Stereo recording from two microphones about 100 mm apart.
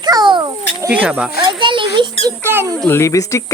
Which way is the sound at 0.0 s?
45° right (ahead or behind).